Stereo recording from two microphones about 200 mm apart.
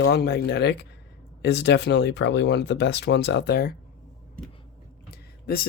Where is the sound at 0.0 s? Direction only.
55° left (ahead or behind).